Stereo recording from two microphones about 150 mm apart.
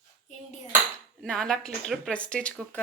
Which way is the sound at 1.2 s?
5° left (ahead or behind).